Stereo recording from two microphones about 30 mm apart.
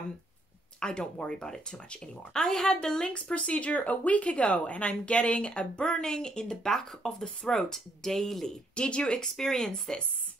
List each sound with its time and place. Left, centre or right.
0.7 s speech: left
3.2 s speech: left
6.6 s speech: centre
8.7 s speech: left
9.4 s speech: centre